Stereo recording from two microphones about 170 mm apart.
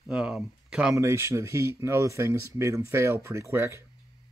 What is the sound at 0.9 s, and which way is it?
Speech, 15° right (ahead or behind).